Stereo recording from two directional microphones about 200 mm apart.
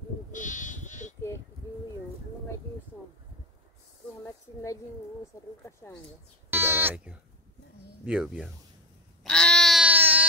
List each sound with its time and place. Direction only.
0.3 s sheep: 40° left (ahead or behind)
5.6 s speech: 15° left (ahead or behind)
6.5 s bleat: 10° right (ahead or behind)
8.0 s speech: 5° right (ahead or behind)
9.2 s a sound: 5° left (ahead or behind)